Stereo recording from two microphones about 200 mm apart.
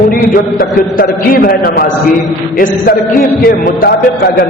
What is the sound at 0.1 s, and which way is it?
A man's voice, 45° left (ahead or behind).